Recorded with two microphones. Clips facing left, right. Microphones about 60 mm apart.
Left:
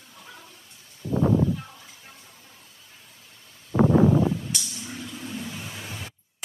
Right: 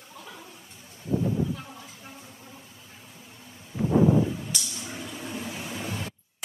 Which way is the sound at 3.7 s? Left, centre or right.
Left.